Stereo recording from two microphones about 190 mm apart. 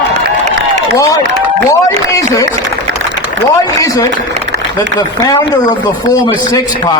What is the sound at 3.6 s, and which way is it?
Speech, 20° left (ahead or behind).